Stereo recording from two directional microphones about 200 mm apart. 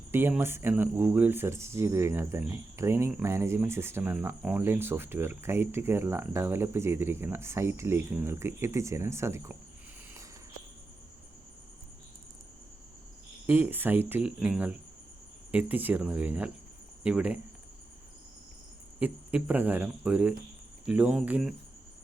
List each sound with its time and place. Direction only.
0.1 s speech: 10° right (ahead or behind)
13.5 s speech: 10° right (ahead or behind)
18.9 s speech: 5° right (ahead or behind)